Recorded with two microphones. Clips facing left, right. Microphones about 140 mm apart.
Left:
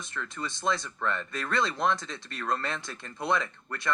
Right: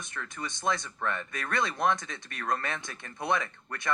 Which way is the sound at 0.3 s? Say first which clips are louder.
Left 1 dB; 20° right (ahead or behind).